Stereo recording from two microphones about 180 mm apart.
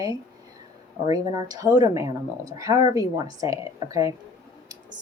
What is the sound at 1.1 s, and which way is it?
Speech, 20° right (ahead or behind).